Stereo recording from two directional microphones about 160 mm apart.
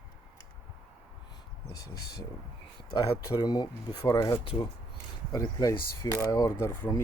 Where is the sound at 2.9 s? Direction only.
25° left (ahead or behind).